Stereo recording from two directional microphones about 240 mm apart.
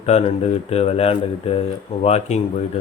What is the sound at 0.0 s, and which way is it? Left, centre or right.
Speech, left.